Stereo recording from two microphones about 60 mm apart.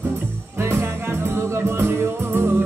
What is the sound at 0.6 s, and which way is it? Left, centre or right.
Music, right.